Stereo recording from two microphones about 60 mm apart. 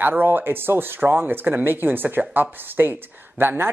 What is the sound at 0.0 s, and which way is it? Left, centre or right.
Speech, right.